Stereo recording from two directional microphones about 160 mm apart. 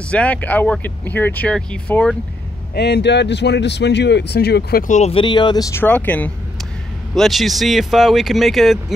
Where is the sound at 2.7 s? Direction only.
90° left.